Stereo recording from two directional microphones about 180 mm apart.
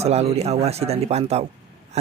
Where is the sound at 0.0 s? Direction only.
35° right (ahead or behind).